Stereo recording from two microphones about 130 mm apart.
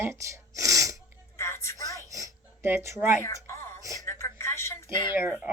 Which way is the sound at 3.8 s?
25° right (ahead or behind).